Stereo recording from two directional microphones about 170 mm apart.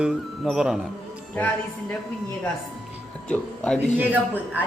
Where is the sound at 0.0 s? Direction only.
5° right (ahead or behind).